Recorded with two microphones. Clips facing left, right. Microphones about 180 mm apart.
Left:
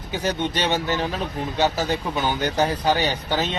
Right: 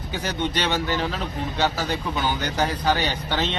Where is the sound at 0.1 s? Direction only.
20° left (ahead or behind).